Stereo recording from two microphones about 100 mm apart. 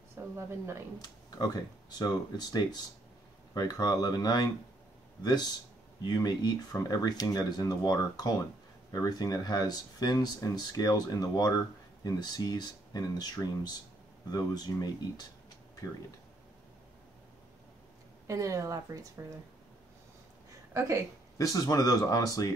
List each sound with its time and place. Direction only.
0.2 s a sound: 25° right (ahead or behind)
0.5 s speech: 30° right (ahead or behind)
1.4 s speech: 40° left (ahead or behind)
18.2 s speech: 35° right (ahead or behind)
20.7 s speech: 35° right (ahead or behind)
21.4 s speech: 35° left (ahead or behind)